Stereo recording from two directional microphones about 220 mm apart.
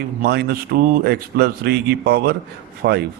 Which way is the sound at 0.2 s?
45° right (ahead or behind).